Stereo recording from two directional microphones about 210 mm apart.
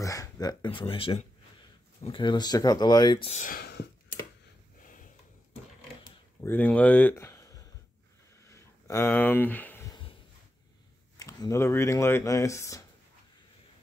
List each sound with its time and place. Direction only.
0.0 s speech: 15° left (ahead or behind); by 3.8 s 45° left (ahead or behind)
6.0 s a sound: 10° left (ahead or behind)
11.1 s speech: 15° left (ahead or behind)